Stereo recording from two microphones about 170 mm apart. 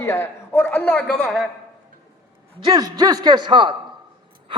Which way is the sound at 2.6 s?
25° right (ahead or behind).